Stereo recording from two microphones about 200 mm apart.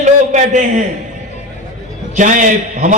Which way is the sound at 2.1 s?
40° right (ahead or behind).